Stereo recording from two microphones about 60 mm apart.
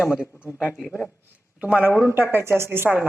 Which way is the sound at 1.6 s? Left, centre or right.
Right.